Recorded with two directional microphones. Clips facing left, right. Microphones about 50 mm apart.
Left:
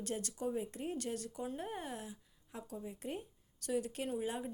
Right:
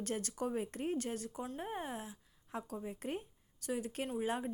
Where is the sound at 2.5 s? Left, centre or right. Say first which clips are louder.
Right 3 dB; right.